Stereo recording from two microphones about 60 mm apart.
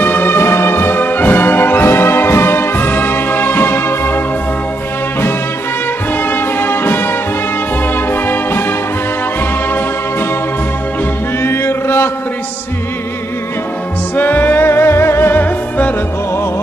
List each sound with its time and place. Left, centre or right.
0.0 s brass instrument: left
6.3 s music: left
11.4 s chant: left
14.1 s music: left